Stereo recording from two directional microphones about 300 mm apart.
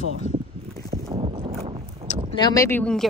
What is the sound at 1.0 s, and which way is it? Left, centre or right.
Boat, centre.